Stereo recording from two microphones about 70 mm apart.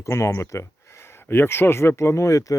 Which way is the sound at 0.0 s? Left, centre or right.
Left.